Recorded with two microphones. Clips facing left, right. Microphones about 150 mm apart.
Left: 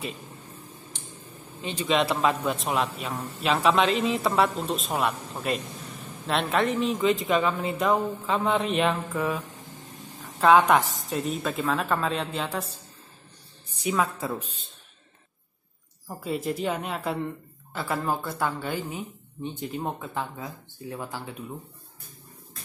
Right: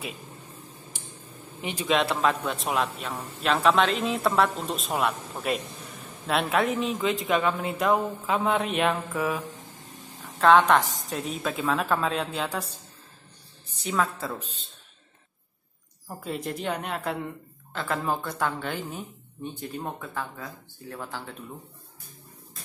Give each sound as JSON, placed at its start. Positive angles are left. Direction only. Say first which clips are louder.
{"t": 0.9, "sound": "a sound", "louder": "even", "side_deg": -5}
{"t": 1.6, "sound": "speech", "louder": "left 1 dB", "side_deg": -15}
{"t": 1.9, "sound": "speech", "louder": "left 1 dB", "side_deg": 0}
{"t": 10.4, "sound": "speech", "louder": "even", "side_deg": 5}
{"t": 11.1, "sound": "speech", "louder": "left 2 dB", "side_deg": 0}
{"t": 13.7, "sound": "a sound", "louder": "left 1 dB", "side_deg": 10}
{"t": 14.2, "sound": "speech", "louder": "left 2 dB", "side_deg": 10}
{"t": 16.1, "sound": "speech", "louder": "left 3 dB", "side_deg": 0}